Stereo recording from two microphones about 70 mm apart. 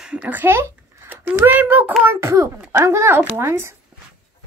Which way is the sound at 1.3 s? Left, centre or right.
Right.